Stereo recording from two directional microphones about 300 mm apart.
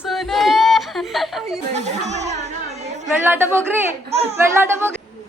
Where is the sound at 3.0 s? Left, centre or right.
Centre.